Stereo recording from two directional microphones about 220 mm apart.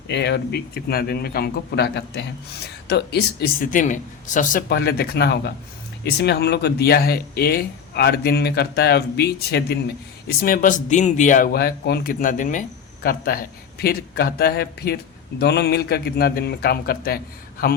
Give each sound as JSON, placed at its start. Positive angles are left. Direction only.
{"t": 0.1, "sound": "a man's voice", "side_deg": 50}